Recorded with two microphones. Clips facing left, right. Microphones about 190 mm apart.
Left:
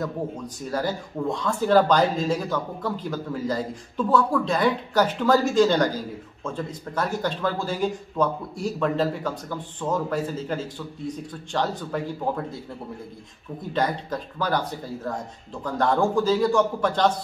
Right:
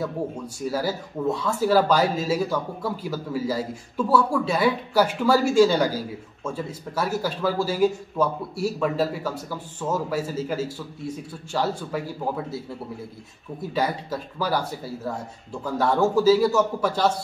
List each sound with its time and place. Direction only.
0.7 s speech: 5° right (ahead or behind)